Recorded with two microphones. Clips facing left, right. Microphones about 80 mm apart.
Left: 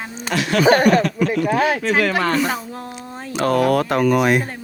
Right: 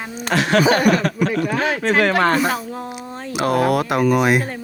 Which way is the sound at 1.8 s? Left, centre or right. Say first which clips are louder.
Right 2 dB; right.